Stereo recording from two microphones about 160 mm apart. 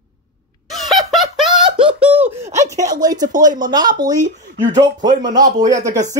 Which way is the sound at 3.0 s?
25° right (ahead or behind).